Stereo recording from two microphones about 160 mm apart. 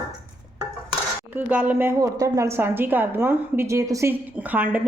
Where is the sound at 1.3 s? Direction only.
10° right (ahead or behind).